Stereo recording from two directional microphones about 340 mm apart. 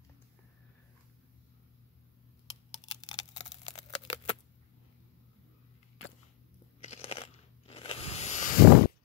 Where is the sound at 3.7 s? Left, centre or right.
Centre.